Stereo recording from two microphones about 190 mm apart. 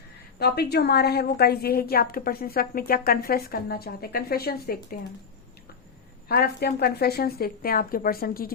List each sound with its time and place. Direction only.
0.3 s a woman's voice: 55° left (ahead or behind)
6.2 s a woman's voice: 55° left (ahead or behind)